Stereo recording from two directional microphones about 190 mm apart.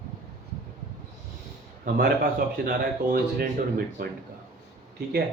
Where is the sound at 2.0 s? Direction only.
50° right (ahead or behind).